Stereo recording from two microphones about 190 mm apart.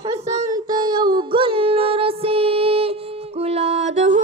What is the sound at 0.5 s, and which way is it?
Music, 20° right (ahead or behind).